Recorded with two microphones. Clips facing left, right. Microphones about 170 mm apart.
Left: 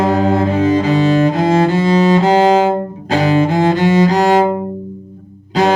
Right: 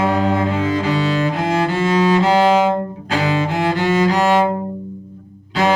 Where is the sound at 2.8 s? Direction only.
20° left (ahead or behind).